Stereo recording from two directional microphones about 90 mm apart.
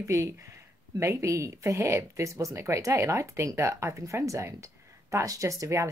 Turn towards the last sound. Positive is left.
turn(degrees=-35)  # may be behind; listen again after turning